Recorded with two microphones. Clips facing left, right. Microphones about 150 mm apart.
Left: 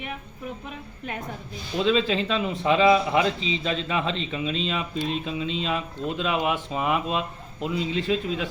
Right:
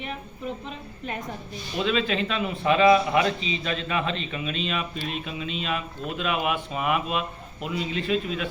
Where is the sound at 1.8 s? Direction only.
25° left (ahead or behind).